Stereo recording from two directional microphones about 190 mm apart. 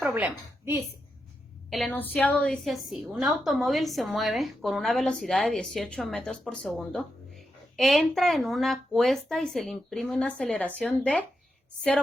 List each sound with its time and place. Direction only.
0.1 s a woman's voice: 10° right (ahead or behind)
1.7 s a woman's voice: 5° left (ahead or behind)